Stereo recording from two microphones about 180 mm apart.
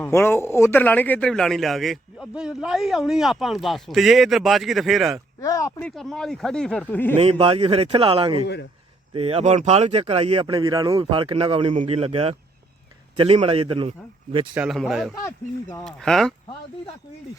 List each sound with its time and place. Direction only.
0.0 s a man's voice: 10° left (ahead or behind)
5.4 s speech: 15° left (ahead or behind)
5.8 s a man's voice: 5° left (ahead or behind)
7.2 s speech: 30° right (ahead or behind)
10.4 s speech: 25° right (ahead or behind)
14.5 s a man's voice: 5° right (ahead or behind)